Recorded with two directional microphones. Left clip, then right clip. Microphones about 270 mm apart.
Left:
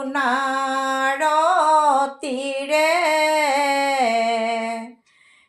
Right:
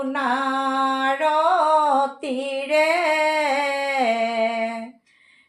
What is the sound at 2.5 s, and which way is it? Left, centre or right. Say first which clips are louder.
Female singing: left 1 dB; left.